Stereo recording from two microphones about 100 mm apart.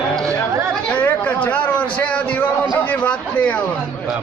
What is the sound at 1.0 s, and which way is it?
A man's voice, 15° left (ahead or behind).